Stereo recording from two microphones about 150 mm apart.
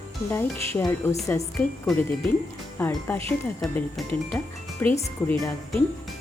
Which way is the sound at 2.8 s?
15° left (ahead or behind).